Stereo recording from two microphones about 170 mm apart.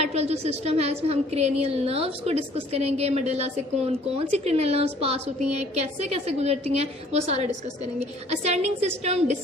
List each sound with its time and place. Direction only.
0.0 s a woman's voice: 40° right (ahead or behind)